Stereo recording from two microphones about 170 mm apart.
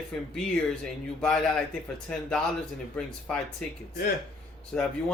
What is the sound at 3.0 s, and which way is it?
Speech, 5° left (ahead or behind).